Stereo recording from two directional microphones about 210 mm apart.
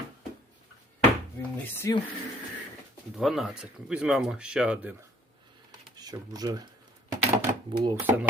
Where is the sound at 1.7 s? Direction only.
10° left (ahead or behind).